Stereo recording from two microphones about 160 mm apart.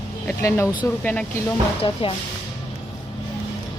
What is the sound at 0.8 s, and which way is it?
Speech, 10° left (ahead or behind).